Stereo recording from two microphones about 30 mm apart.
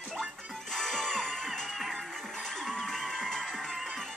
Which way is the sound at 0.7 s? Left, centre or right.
Centre.